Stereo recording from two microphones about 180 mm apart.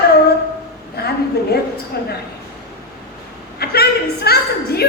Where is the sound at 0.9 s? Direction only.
60° left (ahead or behind).